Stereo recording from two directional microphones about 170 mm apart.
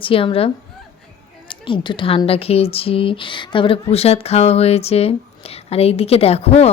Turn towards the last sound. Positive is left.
turn(degrees=35)  # may be behind; listen again after turning